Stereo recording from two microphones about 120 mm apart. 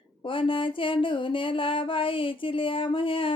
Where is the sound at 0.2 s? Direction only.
45° left (ahead or behind).